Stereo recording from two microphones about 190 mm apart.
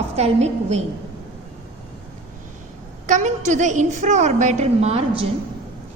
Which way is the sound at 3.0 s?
40° right (ahead or behind).